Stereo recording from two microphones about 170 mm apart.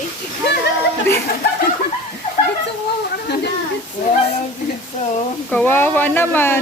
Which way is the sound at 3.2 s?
75° left (ahead or behind).